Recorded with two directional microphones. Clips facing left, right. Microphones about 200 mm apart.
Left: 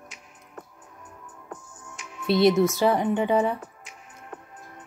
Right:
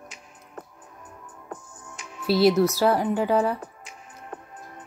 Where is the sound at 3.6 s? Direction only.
35° right (ahead or behind).